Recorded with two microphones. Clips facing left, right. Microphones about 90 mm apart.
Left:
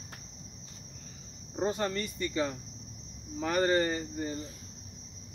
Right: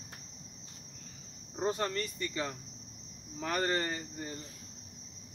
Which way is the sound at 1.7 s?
5° left (ahead or behind).